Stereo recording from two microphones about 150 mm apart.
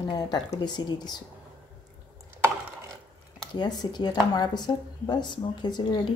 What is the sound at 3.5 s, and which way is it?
Speech, 30° left (ahead or behind).